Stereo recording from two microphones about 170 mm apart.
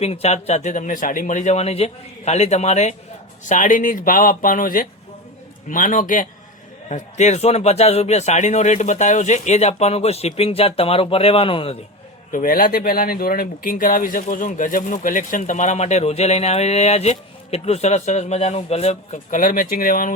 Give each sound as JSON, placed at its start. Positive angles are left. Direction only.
{"t": 0.0, "sound": "a man's voice", "side_deg": 35}
{"t": 12.3, "sound": "speech", "side_deg": 55}